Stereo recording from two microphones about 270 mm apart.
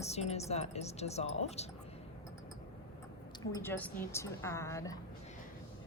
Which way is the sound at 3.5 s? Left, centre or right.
Centre.